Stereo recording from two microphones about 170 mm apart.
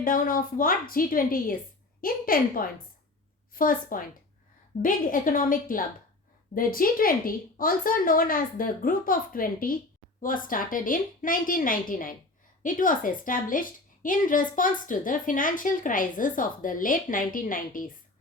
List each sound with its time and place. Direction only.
0.0 s a woman's voice: 55° left (ahead or behind)